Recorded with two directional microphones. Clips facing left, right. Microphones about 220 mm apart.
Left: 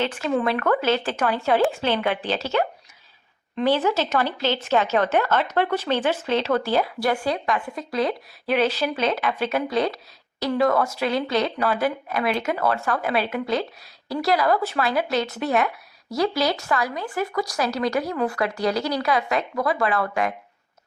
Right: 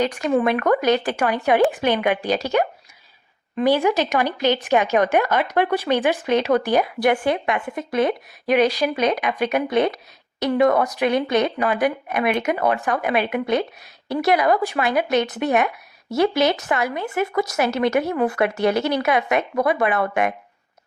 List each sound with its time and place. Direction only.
0.0 s speech: 15° right (ahead or behind)